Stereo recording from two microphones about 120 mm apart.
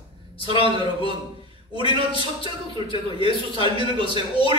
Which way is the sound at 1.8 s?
50° left (ahead or behind).